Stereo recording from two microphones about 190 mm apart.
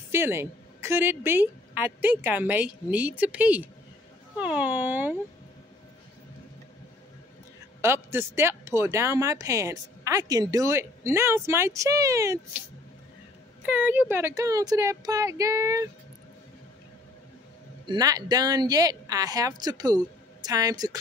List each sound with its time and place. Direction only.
0.1 s speech: 10° right (ahead or behind)
7.8 s speech: 15° right (ahead or behind)
13.7 s speech: 10° right (ahead or behind)
17.8 s speech: 20° right (ahead or behind)